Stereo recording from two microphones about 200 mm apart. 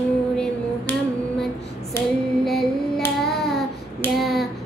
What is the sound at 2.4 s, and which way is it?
Music, centre (ahead or behind).